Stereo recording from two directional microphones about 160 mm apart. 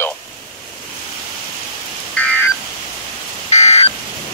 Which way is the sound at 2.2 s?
5° left (ahead or behind).